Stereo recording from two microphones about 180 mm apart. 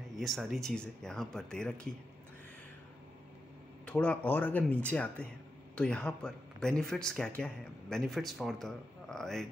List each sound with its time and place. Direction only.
0.2 s speech: centre (ahead or behind)
3.8 s speech: 5° left (ahead or behind)